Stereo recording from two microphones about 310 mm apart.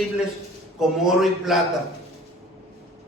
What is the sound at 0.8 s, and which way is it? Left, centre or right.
Speech, centre.